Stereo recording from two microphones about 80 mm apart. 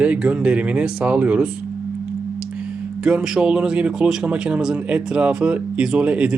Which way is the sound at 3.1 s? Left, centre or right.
Centre.